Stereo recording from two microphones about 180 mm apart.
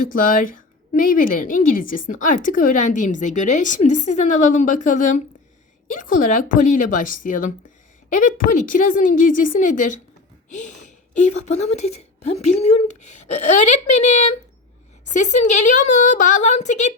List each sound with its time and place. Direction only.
0.1 s a woman's voice: 50° left (ahead or behind)